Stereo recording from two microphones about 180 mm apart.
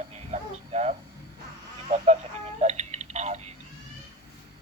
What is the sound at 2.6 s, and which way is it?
Tick, 40° right (ahead or behind).